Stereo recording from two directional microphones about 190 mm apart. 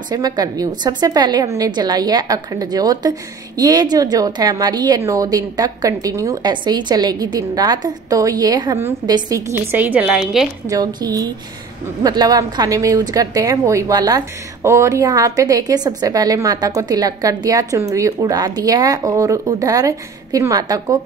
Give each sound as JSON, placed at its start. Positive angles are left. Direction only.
{"t": 0.1, "sound": "a woman's voice", "side_deg": -20}
{"t": 10.7, "sound": "a woman's voice", "side_deg": -20}